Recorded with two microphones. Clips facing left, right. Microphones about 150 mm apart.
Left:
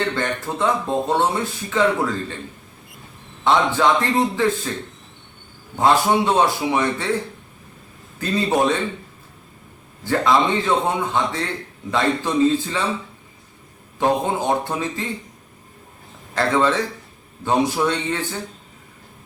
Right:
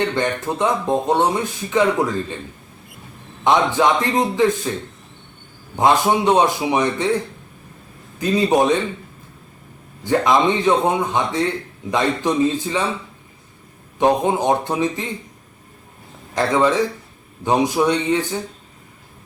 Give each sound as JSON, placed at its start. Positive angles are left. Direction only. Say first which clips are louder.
{"t": 0.1, "sound": "speech", "louder": "right 3 dB", "side_deg": -15}
{"t": 3.4, "sound": "speech", "louder": "right 1 dB", "side_deg": -15}
{"t": 5.7, "sound": "speech", "louder": "right 1 dB", "side_deg": -15}
{"t": 8.2, "sound": "speech", "louder": "right 3 dB", "side_deg": -15}
{"t": 10.0, "sound": "speech", "louder": "right 2 dB", "side_deg": -15}
{"t": 14.0, "sound": "speech", "louder": "right 3 dB", "side_deg": -15}
{"t": 16.3, "sound": "speech", "louder": "right 2 dB", "side_deg": -15}